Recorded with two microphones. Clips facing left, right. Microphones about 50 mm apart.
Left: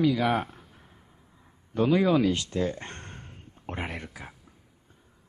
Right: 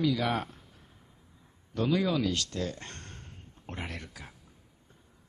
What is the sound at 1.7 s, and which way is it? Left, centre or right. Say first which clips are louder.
Speech: left 6 dB; left.